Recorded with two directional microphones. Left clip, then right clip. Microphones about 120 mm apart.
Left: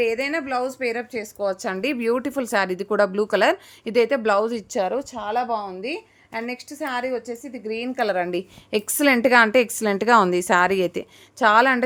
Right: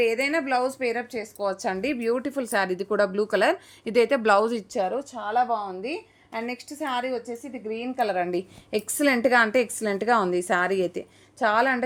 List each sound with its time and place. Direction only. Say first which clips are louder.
0.0 s speech: left 1 dB; 5° left (ahead or behind)
1.2 s a woman's voice: left 2 dB; 25° left (ahead or behind)
3.9 s speech: left 1 dB; 5° left (ahead or behind)
4.7 s a woman's voice: left 3 dB; 30° left (ahead or behind); by 5.6 s 50° left (ahead or behind)
6.3 s speech: left 2 dB; 15° left (ahead or behind)
7.4 s a woman's voice: left 3 dB; 35° left (ahead or behind)